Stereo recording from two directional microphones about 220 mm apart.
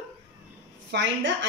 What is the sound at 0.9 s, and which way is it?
Speech, 55° right (ahead or behind).